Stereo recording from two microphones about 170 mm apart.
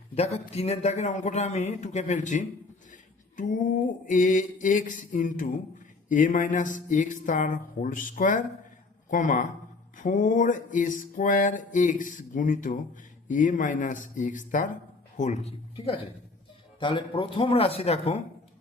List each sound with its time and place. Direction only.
0.1 s speech: 40° left (ahead or behind)
2.9 s mantra: 50° left (ahead or behind)
9.0 s speech: 50° left (ahead or behind)
10.0 s mantra: 50° left (ahead or behind)
15.2 s speech: 40° left (ahead or behind)